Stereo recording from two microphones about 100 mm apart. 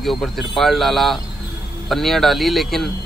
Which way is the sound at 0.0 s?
Centre (ahead or behind).